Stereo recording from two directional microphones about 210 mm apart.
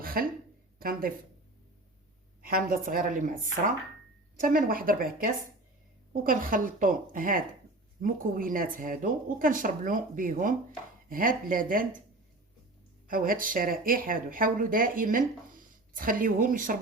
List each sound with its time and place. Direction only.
0.0 s a sound: 45° right (ahead or behind)
0.8 s a woman's voice: 45° right (ahead or behind)
2.4 s a woman's voice: 45° right (ahead or behind)
13.1 s speech: 45° right (ahead or behind)